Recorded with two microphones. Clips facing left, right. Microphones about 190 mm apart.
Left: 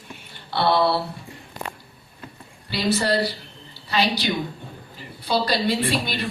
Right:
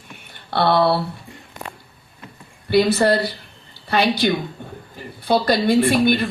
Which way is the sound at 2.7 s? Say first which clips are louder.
Right 7 dB; 55° right (ahead or behind).